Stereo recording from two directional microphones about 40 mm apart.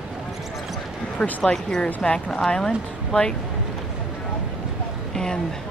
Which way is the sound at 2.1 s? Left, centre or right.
Left.